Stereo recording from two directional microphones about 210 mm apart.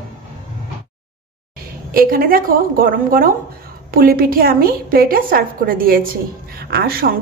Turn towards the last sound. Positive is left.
turn(degrees=-45)  # may be behind; listen again after turning